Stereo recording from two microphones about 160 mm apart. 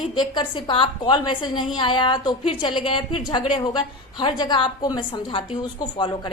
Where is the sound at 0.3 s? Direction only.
30° left (ahead or behind).